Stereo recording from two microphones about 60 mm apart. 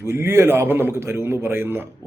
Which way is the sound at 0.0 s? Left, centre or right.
Right.